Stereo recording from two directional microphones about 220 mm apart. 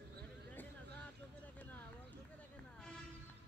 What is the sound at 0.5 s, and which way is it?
Vehicle, 5° left (ahead or behind).